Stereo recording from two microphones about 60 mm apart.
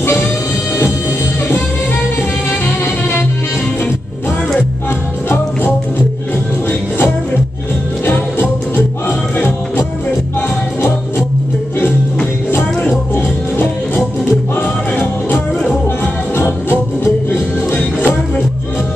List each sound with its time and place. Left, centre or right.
0.0 s music: left
2.6 s music: left
5.3 s music: left
8.0 s music: left
13.1 s music: left